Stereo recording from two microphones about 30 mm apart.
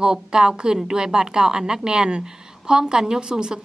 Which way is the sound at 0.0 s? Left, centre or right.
Right.